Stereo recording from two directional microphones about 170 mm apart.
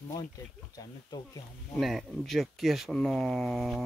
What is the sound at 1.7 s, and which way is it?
Speech, centre (ahead or behind).